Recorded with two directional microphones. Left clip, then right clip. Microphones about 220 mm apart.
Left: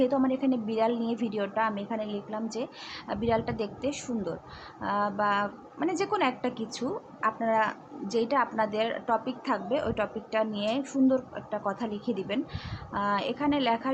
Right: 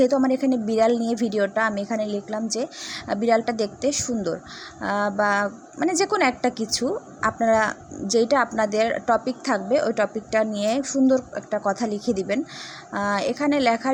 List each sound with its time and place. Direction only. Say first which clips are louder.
0.0 s a woman's voice: right 7 dB; 25° right (ahead or behind)